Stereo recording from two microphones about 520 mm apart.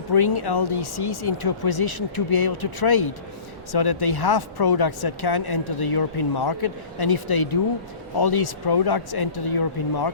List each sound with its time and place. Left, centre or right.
0.1 s speech: left